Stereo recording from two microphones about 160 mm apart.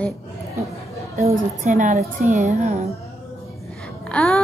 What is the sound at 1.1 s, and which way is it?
A woman's voice, 50° right (ahead or behind).